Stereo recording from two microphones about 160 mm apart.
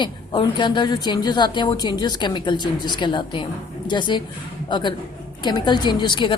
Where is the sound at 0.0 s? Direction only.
30° left (ahead or behind).